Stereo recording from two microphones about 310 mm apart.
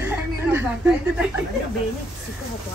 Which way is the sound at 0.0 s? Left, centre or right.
Centre.